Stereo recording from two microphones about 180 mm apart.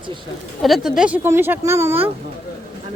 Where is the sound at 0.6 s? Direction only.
Centre (ahead or behind).